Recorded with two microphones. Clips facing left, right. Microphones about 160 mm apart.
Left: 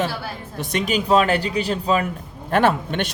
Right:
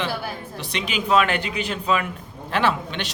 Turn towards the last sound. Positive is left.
turn(degrees=50)  # may be behind; listen again after turning